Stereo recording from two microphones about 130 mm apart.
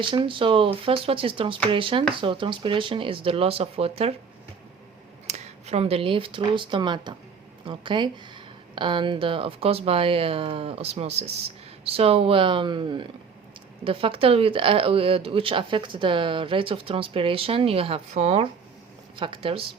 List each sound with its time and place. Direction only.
0.0 s speech: 40° right (ahead or behind)
5.3 s a woman's voice: 55° right (ahead or behind)
19.1 s a woman's voice: 40° right (ahead or behind)